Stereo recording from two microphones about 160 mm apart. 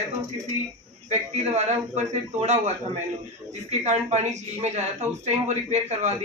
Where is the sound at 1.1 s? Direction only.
45° right (ahead or behind).